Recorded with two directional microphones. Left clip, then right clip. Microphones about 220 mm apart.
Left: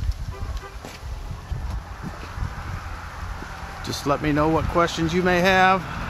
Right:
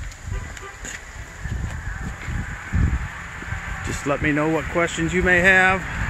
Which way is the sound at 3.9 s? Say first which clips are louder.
Right 1 dB; centre (ahead or behind).